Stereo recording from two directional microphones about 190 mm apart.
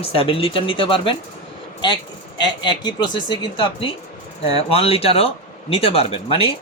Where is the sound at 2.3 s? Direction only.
25° left (ahead or behind).